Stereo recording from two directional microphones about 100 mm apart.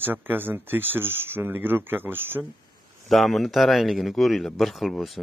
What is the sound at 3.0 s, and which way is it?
Speech, centre (ahead or behind).